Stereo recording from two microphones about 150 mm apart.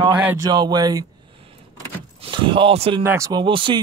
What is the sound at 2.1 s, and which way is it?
Speech, 35° right (ahead or behind).